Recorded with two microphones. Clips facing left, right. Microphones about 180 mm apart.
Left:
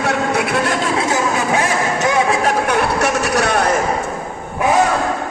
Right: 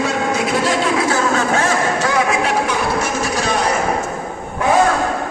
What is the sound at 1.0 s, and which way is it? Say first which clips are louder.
Speech: right 1 dB; 20° left (ahead or behind).